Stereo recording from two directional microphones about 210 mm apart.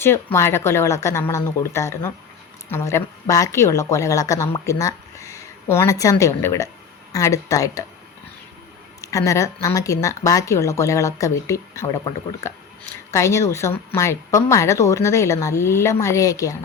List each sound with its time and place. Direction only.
0.0 s speech: 10° left (ahead or behind)
9.0 s speech: 15° left (ahead or behind)